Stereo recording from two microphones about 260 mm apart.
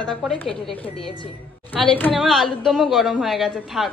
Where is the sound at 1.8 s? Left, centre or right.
Centre.